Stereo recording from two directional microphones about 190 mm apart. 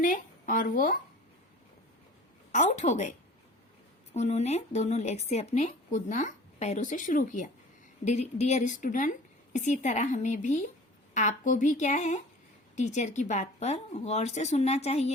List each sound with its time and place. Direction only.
0.0 s speech: 45° left (ahead or behind)
2.5 s speech: 40° left (ahead or behind)